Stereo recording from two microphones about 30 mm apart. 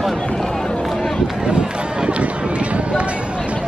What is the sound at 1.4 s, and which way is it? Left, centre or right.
Run, right.